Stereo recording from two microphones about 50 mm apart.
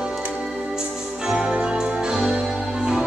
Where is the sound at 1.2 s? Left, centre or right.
Centre.